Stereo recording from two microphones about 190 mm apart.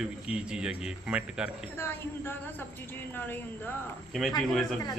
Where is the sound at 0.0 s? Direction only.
5° right (ahead or behind).